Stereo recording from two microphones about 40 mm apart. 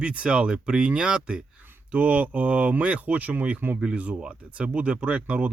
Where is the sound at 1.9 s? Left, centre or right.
Right.